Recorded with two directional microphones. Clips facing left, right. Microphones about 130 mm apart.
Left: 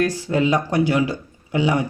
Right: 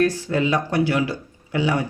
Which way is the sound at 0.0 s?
15° left (ahead or behind).